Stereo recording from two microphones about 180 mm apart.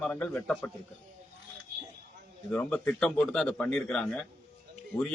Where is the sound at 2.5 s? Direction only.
5° left (ahead or behind).